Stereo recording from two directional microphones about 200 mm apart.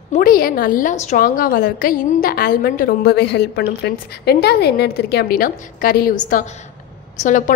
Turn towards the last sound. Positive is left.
turn(degrees=40)  # may be behind; listen again after turning